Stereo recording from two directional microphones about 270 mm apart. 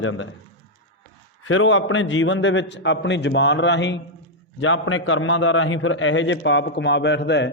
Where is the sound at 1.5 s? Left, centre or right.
Left.